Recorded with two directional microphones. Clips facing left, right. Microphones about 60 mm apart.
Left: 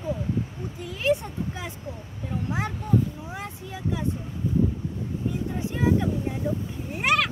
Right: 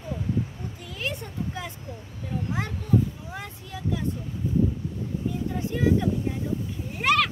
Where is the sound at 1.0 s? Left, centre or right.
Centre.